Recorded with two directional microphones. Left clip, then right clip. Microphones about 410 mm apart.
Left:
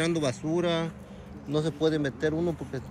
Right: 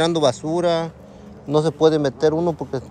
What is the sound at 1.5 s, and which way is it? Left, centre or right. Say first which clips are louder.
Speech: right 10 dB; centre.